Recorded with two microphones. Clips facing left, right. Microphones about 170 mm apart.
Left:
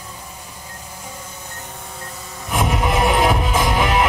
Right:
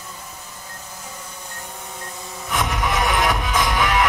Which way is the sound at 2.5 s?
30° left (ahead or behind).